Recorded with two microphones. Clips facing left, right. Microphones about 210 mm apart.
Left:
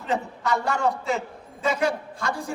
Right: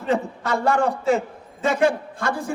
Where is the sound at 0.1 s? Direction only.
55° right (ahead or behind).